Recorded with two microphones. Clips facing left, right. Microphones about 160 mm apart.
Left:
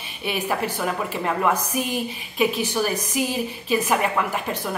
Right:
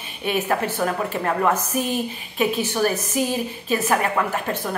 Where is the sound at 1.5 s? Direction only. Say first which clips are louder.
Right 2 dB; 15° left (ahead or behind).